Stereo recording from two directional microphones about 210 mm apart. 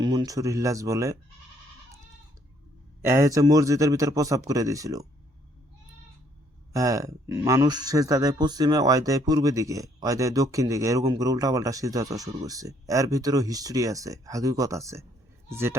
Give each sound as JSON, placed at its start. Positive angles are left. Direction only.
{"t": 0.0, "sound": "speech", "side_deg": -20}
{"t": 3.0, "sound": "speech", "side_deg": -10}
{"t": 6.7, "sound": "speech", "side_deg": -15}